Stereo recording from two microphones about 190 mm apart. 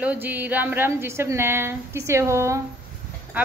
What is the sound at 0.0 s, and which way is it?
A woman's voice, 10° right (ahead or behind).